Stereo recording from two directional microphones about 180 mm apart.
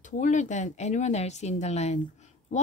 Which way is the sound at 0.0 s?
45° left (ahead or behind).